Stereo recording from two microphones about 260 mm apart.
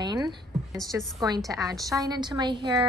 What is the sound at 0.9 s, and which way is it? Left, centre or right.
A woman's voice, centre.